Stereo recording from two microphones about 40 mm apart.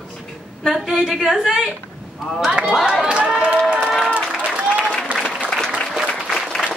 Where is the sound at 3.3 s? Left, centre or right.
Right.